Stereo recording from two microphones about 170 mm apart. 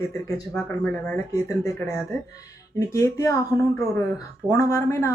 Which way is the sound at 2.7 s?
15° left (ahead or behind).